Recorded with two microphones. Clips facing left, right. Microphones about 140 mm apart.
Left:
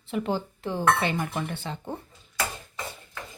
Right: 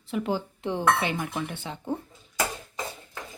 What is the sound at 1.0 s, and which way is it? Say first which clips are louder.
Speech: left 1 dB; 5° right (ahead or behind).